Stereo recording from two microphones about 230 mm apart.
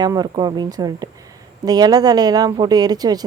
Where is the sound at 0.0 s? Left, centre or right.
Centre.